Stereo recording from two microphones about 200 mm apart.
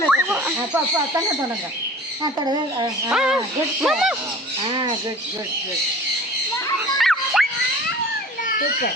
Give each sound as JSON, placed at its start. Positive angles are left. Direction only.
{"t": 0.1, "sound": "a sound", "side_deg": -5}
{"t": 2.2, "sound": "speech", "side_deg": -20}
{"t": 3.1, "sound": "speech", "side_deg": -5}
{"t": 7.0, "sound": "dog", "side_deg": 0}
{"t": 8.4, "sound": "a child's voice", "side_deg": 45}